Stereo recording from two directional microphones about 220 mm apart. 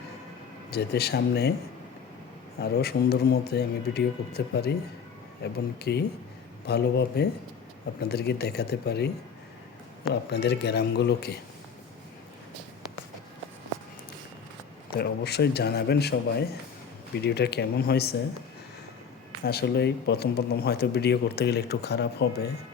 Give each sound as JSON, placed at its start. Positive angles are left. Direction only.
{"t": 0.7, "sound": "speech", "side_deg": 45}
{"t": 2.6, "sound": "speech", "side_deg": 45}
{"t": 10.3, "sound": "speech", "side_deg": 50}
{"t": 14.8, "sound": "speech", "side_deg": 50}
{"t": 19.5, "sound": "speech", "side_deg": 50}